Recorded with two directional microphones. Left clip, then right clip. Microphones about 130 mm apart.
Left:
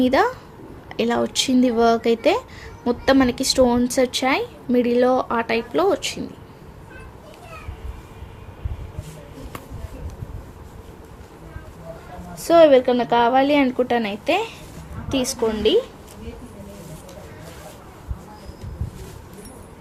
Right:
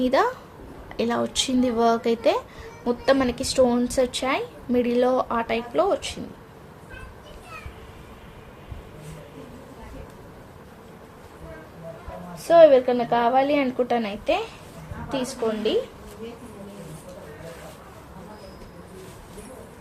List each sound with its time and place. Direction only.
0.0 s a woman's voice: 35° left (ahead or behind); by 6.1 s 60° left (ahead or behind)
12.4 s a woman's voice: 45° left (ahead or behind)
15.1 s a woman's voice: 60° left (ahead or behind)